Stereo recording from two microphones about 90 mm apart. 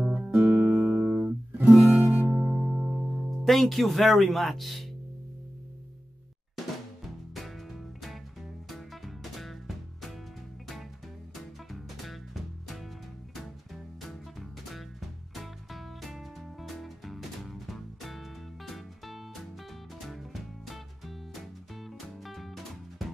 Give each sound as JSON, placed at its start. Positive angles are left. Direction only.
{"t": 0.0, "sound": "music", "side_deg": -15}
{"t": 3.3, "sound": "speech", "side_deg": 0}
{"t": 7.3, "sound": "music", "side_deg": 0}
{"t": 11.7, "sound": "music", "side_deg": 0}
{"t": 14.7, "sound": "music", "side_deg": 0}
{"t": 22.2, "sound": "music", "side_deg": 0}